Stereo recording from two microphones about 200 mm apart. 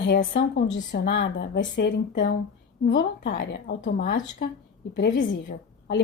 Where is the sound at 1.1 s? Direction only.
60° left (ahead or behind).